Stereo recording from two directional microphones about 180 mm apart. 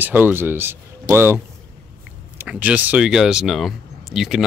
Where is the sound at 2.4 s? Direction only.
10° right (ahead or behind).